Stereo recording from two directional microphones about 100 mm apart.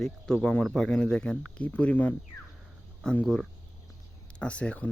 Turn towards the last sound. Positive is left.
turn(degrees=15)  # may be behind; listen again after turning